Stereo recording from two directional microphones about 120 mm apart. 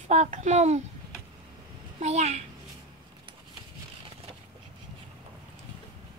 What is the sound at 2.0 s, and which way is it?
Speech, 65° right (ahead or behind).